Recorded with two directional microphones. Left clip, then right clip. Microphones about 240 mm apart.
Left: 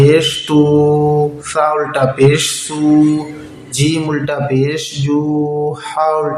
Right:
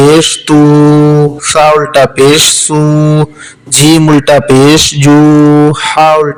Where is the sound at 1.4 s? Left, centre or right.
Right.